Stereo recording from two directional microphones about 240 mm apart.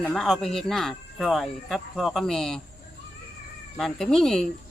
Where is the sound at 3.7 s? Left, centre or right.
Centre.